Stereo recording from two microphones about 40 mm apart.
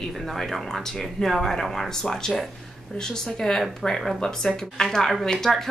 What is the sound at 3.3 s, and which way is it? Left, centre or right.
A woman's voice, centre.